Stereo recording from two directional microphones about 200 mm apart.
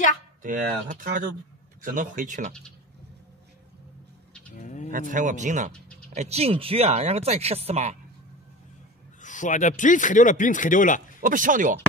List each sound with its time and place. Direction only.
0.4 s speech: 45° right (ahead or behind)
4.6 s speech: 35° left (ahead or behind)
4.9 s speech: 40° right (ahead or behind)
9.2 s speech: 40° left (ahead or behind)
11.1 s speech: 40° right (ahead or behind)